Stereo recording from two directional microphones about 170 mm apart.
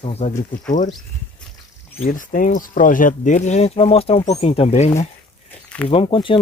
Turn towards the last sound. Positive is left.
turn(degrees=30)  # may be behind; listen again after turning